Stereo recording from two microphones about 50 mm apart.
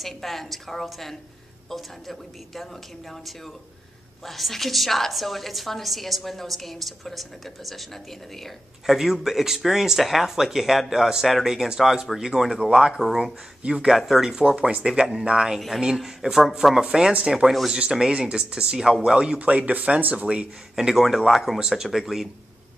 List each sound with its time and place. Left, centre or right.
0.0 s a woman's voice: centre
8.8 s speech: centre
13.6 s speech: centre
13.8 s speech: centre; by 20.2 s right
20.2 s speech: centre
21.5 s a woman's voice: centre